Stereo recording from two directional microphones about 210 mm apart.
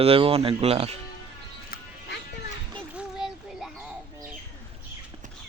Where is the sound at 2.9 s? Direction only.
5° right (ahead or behind).